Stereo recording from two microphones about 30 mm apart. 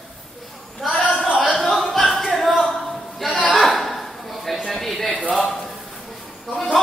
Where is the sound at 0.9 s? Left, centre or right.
Left.